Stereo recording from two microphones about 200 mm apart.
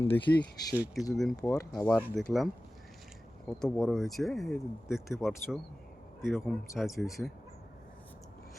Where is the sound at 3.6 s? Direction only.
Centre (ahead or behind).